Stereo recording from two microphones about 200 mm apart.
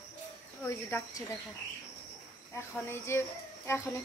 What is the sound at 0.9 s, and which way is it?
Speech, 15° left (ahead or behind).